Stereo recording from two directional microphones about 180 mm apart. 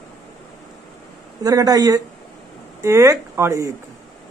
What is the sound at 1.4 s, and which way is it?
A woman's voice, 20° right (ahead or behind).